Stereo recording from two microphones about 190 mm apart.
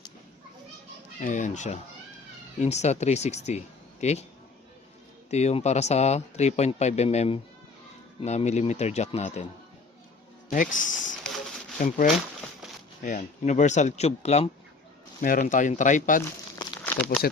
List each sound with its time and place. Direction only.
1.2 s speech: 40° left (ahead or behind)
5.3 s speech: 35° left (ahead or behind)
10.5 s speech: 45° left (ahead or behind)
15.2 s speech: 45° left (ahead or behind)
16.8 s speech: 5° left (ahead or behind)